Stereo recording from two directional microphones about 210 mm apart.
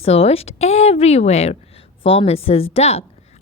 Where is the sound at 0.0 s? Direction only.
30° left (ahead or behind).